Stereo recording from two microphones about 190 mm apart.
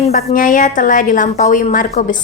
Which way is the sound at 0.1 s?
50° left (ahead or behind).